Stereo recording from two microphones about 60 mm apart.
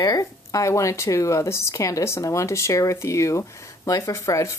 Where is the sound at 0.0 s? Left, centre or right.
Left.